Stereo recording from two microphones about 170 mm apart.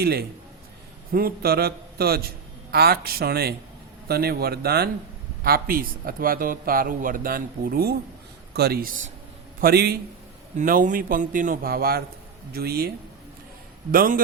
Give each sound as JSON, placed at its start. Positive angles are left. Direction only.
{"t": 0.0, "sound": "a man's voice", "side_deg": -65}
{"t": 10.6, "sound": "a man's voice", "side_deg": -50}
{"t": 13.9, "sound": "a man's voice", "side_deg": -55}